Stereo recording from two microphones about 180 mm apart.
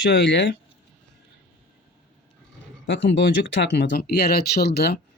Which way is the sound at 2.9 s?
75° left (ahead or behind).